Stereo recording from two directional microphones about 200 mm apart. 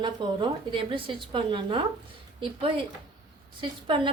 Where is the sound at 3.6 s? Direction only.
25° right (ahead or behind).